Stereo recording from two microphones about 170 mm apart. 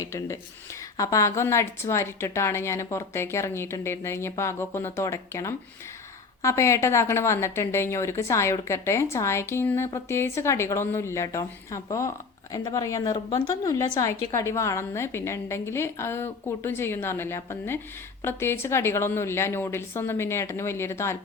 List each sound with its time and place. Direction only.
0.0 s a woman's voice: 15° left (ahead or behind)